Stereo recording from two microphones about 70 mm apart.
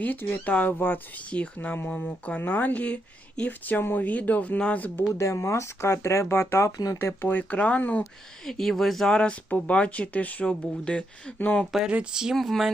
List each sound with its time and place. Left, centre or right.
0.0 s speech: left
5.1 s speech: left
6.7 s speech: left
7.2 s speech: left
8.4 s speech: centre
11.3 s speech: left
11.6 s speech: centre
12.2 s speech: centre